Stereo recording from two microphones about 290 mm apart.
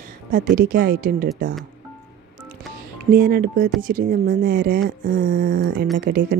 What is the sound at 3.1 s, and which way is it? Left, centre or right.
Speech, right.